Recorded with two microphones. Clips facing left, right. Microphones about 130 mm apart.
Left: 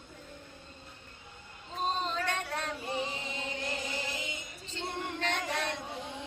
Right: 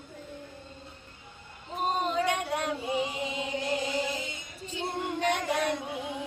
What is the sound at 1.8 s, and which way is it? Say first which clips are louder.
Chant: right 5 dB; 10° right (ahead or behind).